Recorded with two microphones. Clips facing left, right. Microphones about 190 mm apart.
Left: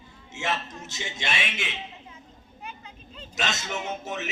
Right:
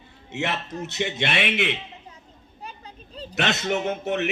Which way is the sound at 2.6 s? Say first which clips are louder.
Right 2 dB; 35° right (ahead or behind).